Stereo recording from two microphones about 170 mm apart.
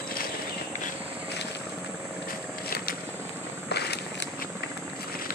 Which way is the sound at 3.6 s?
75° left (ahead or behind).